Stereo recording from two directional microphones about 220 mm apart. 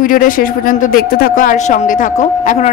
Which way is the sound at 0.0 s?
40° left (ahead or behind).